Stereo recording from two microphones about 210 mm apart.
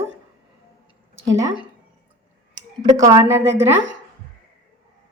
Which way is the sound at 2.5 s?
15° right (ahead or behind).